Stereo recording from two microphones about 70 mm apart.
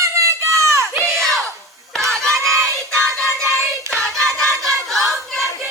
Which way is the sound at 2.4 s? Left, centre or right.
Centre.